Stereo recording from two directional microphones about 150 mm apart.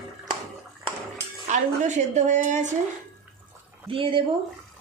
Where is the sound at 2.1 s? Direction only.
50° right (ahead or behind).